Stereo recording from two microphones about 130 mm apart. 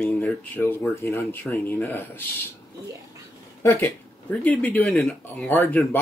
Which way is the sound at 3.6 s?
20° left (ahead or behind).